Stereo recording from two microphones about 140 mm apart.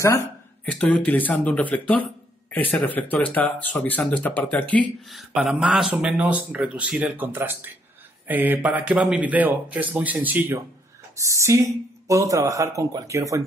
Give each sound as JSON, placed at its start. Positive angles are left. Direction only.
{"t": 0.7, "sound": "speech", "side_deg": 10}
{"t": 5.1, "sound": "speech", "side_deg": 0}